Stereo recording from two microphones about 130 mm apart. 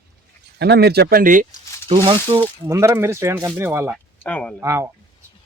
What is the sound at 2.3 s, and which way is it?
Speech, 40° right (ahead or behind).